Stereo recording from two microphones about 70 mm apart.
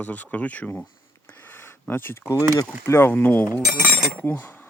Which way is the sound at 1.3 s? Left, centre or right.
Left.